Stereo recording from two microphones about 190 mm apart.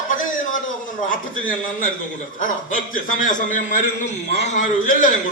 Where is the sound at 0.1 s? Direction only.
45° left (ahead or behind).